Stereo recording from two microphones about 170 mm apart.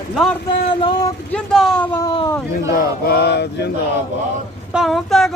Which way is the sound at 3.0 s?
70° left (ahead or behind).